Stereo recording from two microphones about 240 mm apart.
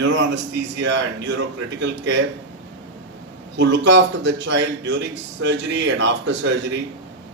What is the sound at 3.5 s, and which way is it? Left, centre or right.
A man's voice, right.